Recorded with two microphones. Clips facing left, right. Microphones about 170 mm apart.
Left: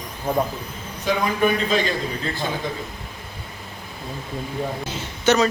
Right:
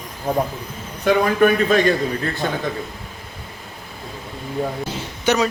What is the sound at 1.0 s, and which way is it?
Speech, 55° right (ahead or behind).